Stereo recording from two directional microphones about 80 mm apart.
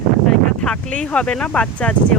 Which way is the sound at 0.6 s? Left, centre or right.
Centre.